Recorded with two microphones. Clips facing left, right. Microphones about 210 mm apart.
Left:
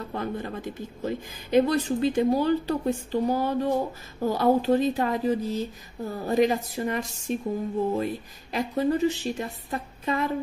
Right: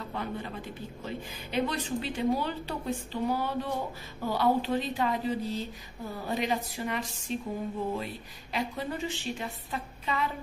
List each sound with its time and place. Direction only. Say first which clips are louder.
0.1 s a woman's voice: left 5 dB; 45° left (ahead or behind)